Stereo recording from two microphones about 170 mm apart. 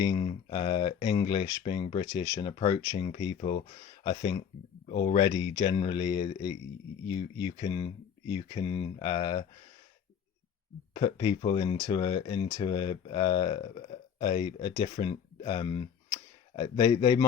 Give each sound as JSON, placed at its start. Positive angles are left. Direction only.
{"t": 0.0, "sound": "speech", "side_deg": 25}
{"t": 10.9, "sound": "speech", "side_deg": 30}